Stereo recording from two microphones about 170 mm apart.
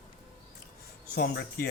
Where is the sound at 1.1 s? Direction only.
70° left (ahead or behind).